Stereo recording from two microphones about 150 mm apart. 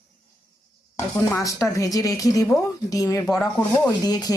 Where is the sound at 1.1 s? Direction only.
20° left (ahead or behind).